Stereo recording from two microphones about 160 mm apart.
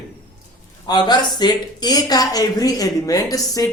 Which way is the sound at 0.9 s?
25° left (ahead or behind).